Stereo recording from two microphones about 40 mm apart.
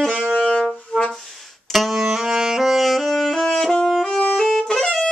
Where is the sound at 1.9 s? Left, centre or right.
Centre.